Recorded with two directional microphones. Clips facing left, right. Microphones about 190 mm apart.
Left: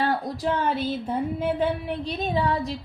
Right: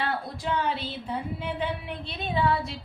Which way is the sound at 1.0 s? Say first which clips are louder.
Left 7 dB; 50° left (ahead or behind).